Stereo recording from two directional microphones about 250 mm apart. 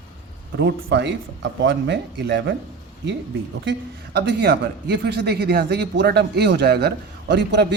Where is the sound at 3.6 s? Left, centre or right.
Right.